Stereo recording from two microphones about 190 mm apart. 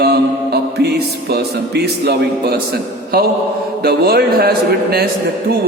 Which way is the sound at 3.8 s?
55° right (ahead or behind).